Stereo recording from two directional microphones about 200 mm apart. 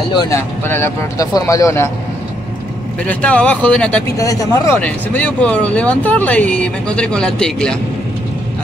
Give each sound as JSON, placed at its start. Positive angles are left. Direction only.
{"t": 0.1, "sound": "speech", "side_deg": 20}
{"t": 3.1, "sound": "speech", "side_deg": 5}
{"t": 4.2, "sound": "speech", "side_deg": 15}